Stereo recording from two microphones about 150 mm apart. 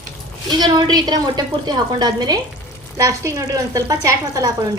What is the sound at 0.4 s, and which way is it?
A woman's voice, 30° right (ahead or behind).